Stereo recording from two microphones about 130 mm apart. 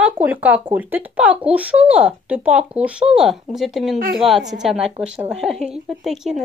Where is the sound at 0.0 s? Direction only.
15° right (ahead or behind).